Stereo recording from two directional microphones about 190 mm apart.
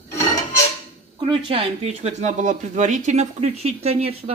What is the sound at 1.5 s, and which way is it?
Speech, 30° right (ahead or behind).